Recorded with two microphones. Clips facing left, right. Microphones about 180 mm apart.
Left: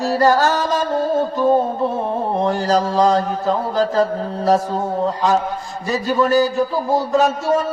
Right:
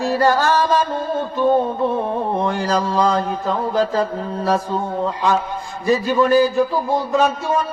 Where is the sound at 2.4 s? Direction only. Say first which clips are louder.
Left 2 dB; 40° left (ahead or behind).